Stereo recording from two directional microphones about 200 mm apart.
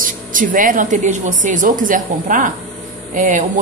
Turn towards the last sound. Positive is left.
turn(degrees=-40)  # may be behind; listen again after turning